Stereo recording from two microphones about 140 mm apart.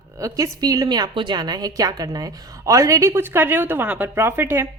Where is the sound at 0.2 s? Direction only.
20° right (ahead or behind).